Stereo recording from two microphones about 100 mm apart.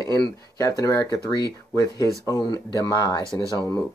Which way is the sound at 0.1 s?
35° left (ahead or behind).